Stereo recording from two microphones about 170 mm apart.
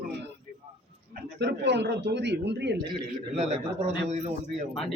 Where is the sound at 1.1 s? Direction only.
85° right.